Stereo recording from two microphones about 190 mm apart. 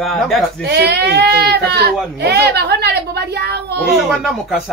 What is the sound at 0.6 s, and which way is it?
A woman's voice, 60° right (ahead or behind).